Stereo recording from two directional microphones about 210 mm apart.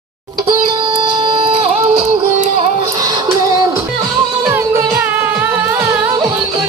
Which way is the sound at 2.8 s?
15° right (ahead or behind).